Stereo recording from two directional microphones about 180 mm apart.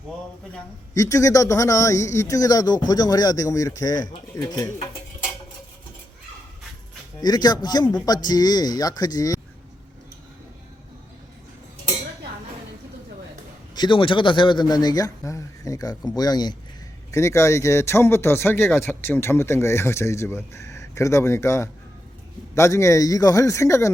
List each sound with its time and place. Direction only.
0.9 s a man's voice: 15° left (ahead or behind)
7.2 s a man's voice: 20° left (ahead or behind)
13.7 s a man's voice: 25° left (ahead or behind)